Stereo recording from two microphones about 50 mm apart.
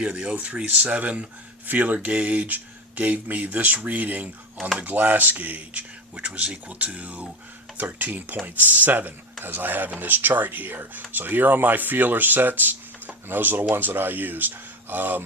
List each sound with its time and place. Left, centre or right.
0.0 s speech: right